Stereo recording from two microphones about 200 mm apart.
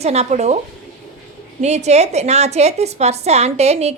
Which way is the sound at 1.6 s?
35° right (ahead or behind).